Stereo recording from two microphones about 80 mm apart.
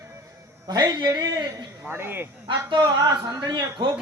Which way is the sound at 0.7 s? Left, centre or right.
Right.